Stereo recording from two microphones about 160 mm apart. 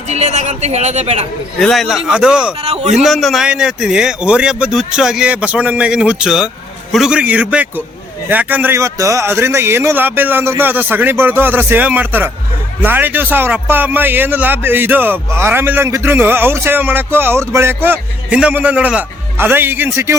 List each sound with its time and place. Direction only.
0.1 s a woman's voice: 45° right (ahead or behind)
1.5 s a man's voice: centre (ahead or behind)
2.6 s a man's voice: 40° right (ahead or behind)
2.9 s a man's voice: centre (ahead or behind); by 20.1 s 15° right (ahead or behind)